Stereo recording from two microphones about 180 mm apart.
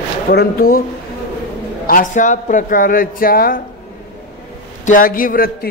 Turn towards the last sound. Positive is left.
turn(degrees=55)  # may be behind; listen again after turning